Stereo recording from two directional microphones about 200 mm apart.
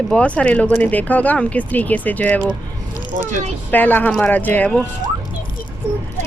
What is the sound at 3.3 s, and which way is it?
Speech, 40° right (ahead or behind).